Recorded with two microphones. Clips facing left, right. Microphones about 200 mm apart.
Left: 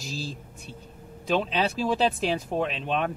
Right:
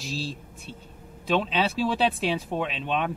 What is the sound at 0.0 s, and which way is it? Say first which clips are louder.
Speech: right 2 dB; centre (ahead or behind).